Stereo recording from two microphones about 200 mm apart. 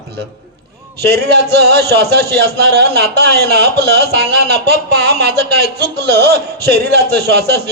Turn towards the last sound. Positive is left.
turn(degrees=-55)  # may be behind; listen again after turning